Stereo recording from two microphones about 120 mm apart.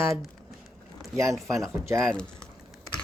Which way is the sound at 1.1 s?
25° right (ahead or behind).